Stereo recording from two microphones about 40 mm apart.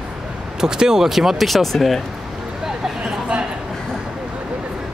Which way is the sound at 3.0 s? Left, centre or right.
Right.